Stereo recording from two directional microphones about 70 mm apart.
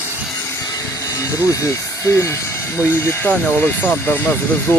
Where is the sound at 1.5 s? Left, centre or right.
Left.